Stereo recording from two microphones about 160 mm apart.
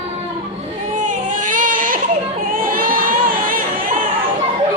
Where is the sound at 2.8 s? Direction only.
60° right (ahead or behind).